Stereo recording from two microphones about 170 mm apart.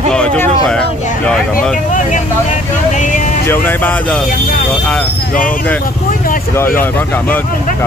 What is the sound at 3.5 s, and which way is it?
Speech, 10° left (ahead or behind).